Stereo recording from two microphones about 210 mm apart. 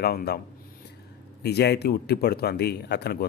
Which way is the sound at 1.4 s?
50° left (ahead or behind).